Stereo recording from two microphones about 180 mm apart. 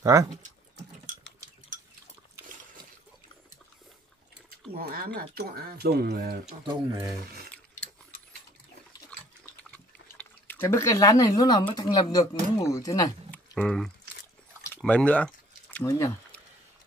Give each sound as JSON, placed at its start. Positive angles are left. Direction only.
{"t": 0.0, "sound": "speech", "side_deg": -15}
{"t": 4.7, "sound": "speech", "side_deg": -55}
{"t": 6.6, "sound": "speech", "side_deg": -20}
{"t": 9.6, "sound": "speech", "side_deg": 10}
{"t": 13.6, "sound": "speech", "side_deg": 5}
{"t": 14.8, "sound": "a sound", "side_deg": 5}